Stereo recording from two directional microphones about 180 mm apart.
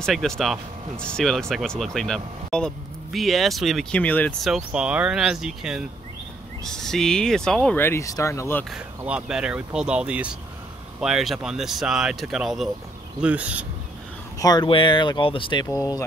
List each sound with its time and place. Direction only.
0.0 s speech: centre (ahead or behind)
8.7 s speech: 5° right (ahead or behind)
14.4 s speech: 20° left (ahead or behind)